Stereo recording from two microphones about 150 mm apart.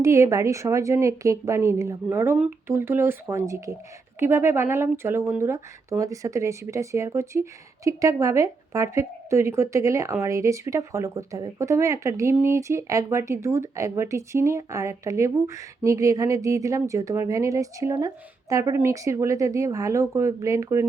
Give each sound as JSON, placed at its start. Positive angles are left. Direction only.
{"t": 0.0, "sound": "a woman's voice", "side_deg": -20}